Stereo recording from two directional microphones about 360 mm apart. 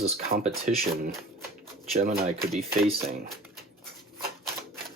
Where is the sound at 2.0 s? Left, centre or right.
Right.